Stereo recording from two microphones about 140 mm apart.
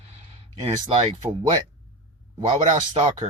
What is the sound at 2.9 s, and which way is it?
Speech, 35° right (ahead or behind).